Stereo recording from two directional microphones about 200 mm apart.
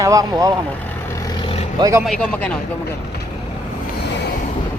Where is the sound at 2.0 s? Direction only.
5° left (ahead or behind).